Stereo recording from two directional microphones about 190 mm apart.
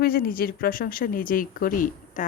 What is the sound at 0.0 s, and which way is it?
Speech, 50° left (ahead or behind).